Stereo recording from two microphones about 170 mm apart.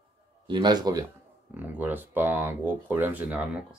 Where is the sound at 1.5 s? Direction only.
10° right (ahead or behind).